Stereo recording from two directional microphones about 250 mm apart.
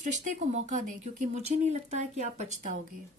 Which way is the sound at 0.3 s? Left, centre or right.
Right.